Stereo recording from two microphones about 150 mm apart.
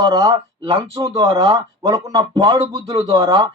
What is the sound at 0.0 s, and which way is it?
Speech, 30° right (ahead or behind).